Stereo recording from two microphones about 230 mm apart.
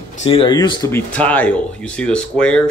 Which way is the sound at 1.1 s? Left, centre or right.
Centre.